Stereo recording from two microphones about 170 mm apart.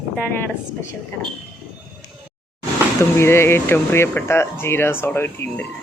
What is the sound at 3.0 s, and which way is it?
Speech, 15° left (ahead or behind).